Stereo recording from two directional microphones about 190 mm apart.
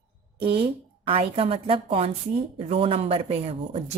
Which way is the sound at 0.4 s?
30° right (ahead or behind).